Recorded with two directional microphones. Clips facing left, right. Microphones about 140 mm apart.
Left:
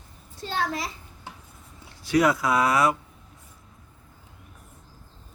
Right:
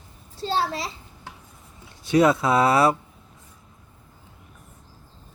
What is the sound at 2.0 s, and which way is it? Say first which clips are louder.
Speech: right 3 dB; 25° right (ahead or behind).